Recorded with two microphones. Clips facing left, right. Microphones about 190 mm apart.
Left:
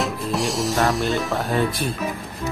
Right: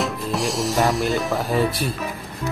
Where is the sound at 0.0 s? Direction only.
Centre (ahead or behind).